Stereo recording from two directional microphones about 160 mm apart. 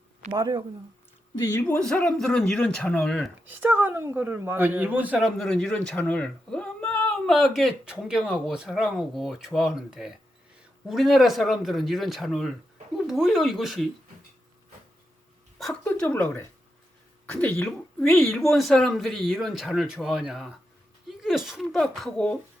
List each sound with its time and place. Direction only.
0.3 s speech: 20° right (ahead or behind)
1.6 s speech: 5° left (ahead or behind)
3.5 s speech: 10° right (ahead or behind)
15.8 s speech: 15° left (ahead or behind)
17.6 s speech: 5° left (ahead or behind)